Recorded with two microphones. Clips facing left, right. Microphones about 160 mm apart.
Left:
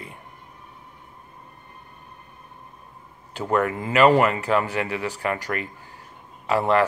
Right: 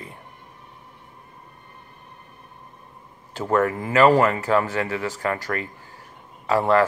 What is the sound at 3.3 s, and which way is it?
Speech, 35° right (ahead or behind).